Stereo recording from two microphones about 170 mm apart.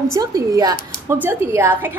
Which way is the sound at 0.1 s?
20° right (ahead or behind).